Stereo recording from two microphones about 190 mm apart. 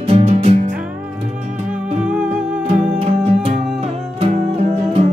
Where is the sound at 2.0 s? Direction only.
5° right (ahead or behind).